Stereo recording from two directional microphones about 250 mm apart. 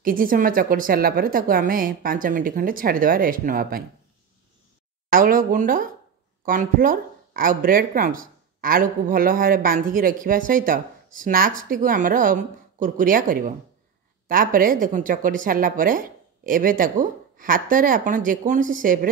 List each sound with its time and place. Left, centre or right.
0.0 s speech: right
5.1 s speech: right